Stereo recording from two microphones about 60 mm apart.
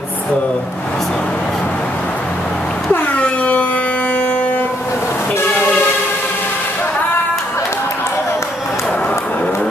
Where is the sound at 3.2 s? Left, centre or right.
Left.